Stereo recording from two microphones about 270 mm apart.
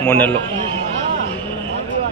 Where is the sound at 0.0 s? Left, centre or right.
Centre.